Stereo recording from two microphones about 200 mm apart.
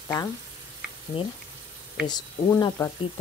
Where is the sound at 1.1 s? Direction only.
25° left (ahead or behind).